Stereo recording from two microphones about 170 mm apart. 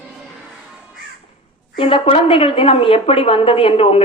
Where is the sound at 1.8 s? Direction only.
30° left (ahead or behind).